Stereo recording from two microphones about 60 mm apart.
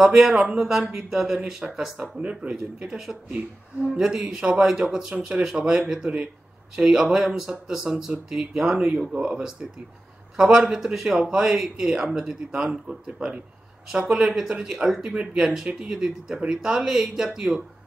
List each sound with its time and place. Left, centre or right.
0.0 s a man's voice: centre
2.0 s a man's voice: centre